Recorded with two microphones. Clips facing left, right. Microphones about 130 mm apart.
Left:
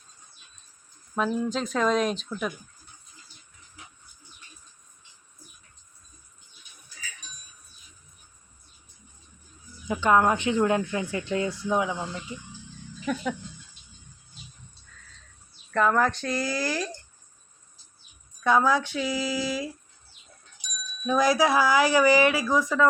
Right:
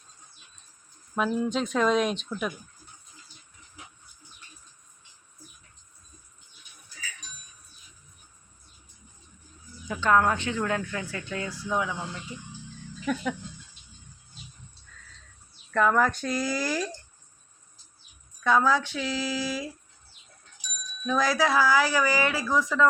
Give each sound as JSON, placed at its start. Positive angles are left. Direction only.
{"t": 1.1, "sound": "speech", "side_deg": 0}
{"t": 9.8, "sound": "speech", "side_deg": 15}
{"t": 13.1, "sound": "speech", "side_deg": 0}
{"t": 15.7, "sound": "speech", "side_deg": 0}
{"t": 18.4, "sound": "speech", "side_deg": 10}
{"t": 21.1, "sound": "speech", "side_deg": 15}